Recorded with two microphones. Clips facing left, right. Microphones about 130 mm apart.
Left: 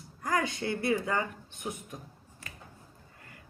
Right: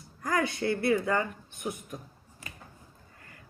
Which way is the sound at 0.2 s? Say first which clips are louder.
Right 2 dB; 25° left (ahead or behind).